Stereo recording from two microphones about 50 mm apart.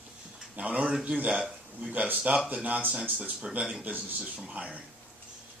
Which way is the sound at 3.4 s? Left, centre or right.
Centre.